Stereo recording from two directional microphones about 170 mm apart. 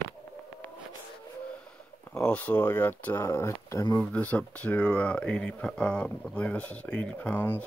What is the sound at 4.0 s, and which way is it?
Speech, 10° left (ahead or behind).